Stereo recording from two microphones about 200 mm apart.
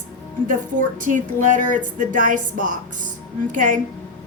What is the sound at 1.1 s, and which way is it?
A woman's voice, 40° right (ahead or behind).